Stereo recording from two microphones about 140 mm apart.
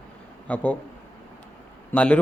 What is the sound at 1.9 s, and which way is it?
Speech, 10° left (ahead or behind).